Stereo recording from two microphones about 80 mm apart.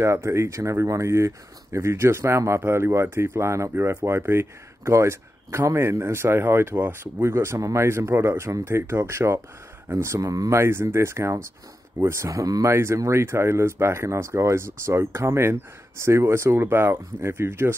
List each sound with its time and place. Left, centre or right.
0.0 s speech: right
10.6 s speech: right
12.6 s speech: right